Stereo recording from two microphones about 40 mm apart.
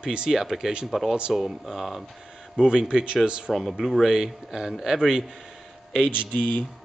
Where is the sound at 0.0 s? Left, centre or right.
Centre.